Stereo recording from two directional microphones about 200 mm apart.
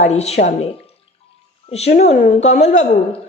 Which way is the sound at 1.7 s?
35° left (ahead or behind).